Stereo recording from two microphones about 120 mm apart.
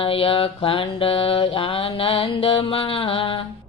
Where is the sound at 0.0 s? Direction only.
50° left (ahead or behind).